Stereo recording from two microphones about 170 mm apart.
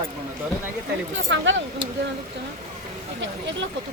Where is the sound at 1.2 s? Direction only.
90° right.